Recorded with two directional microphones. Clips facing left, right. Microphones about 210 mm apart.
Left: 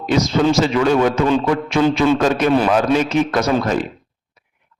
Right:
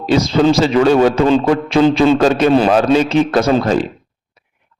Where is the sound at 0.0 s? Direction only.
30° right (ahead or behind).